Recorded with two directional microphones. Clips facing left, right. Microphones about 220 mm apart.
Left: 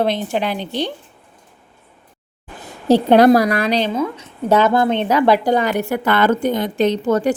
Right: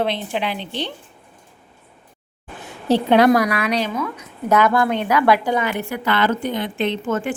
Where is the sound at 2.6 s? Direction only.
40° left (ahead or behind).